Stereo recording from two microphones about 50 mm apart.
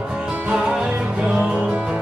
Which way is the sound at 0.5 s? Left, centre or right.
Centre.